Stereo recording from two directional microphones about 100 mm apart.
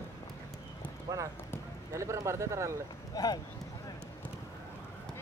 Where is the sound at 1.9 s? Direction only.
30° right (ahead or behind).